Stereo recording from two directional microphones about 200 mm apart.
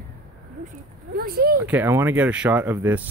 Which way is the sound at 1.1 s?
50° right (ahead or behind).